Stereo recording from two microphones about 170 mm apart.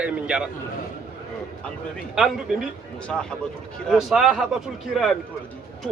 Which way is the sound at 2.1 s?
5° right (ahead or behind).